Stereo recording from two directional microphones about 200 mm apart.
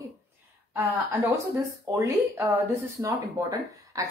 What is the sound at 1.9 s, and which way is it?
A woman's voice, 15° right (ahead or behind).